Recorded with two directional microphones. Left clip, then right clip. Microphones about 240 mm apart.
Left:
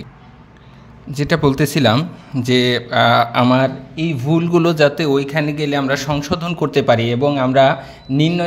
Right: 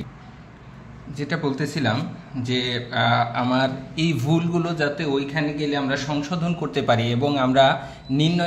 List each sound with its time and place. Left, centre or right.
1.1 s a man's voice: left
3.9 s a man's voice: centre
4.5 s a man's voice: left